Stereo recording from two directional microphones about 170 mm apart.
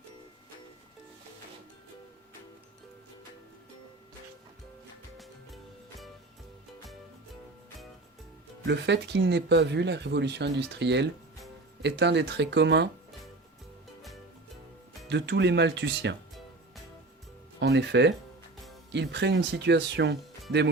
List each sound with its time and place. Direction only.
8.6 s speech: 90° right
15.1 s speech: 90° right
17.6 s speech: 85° right